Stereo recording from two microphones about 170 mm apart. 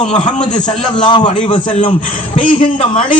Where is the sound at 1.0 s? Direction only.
25° left (ahead or behind).